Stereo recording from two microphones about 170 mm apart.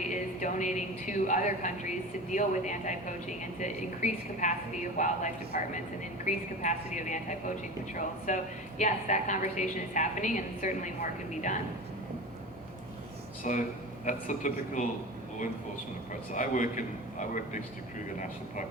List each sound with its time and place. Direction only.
0.1 s a woman's voice: 45° left (ahead or behind)
13.4 s a woman's voice: 45° left (ahead or behind)
16.3 s a woman's voice: 50° left (ahead or behind)